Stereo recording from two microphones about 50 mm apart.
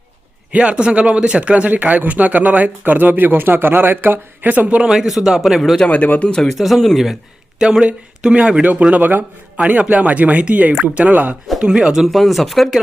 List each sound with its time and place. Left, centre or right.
0.5 s speech: right
4.4 s speech: right
4.8 s speech: centre
5.9 s speech: left
6.2 s speech: centre
8.6 s speech: right
11.6 s speech: centre
12.0 s speech: centre